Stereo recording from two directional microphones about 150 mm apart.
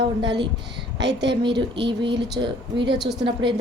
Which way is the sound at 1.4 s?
30° right (ahead or behind).